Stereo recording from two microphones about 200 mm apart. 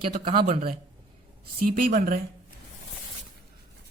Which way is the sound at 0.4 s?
40° right (ahead or behind).